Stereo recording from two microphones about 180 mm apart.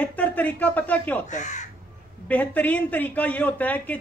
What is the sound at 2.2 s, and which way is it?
Speech, 10° left (ahead or behind).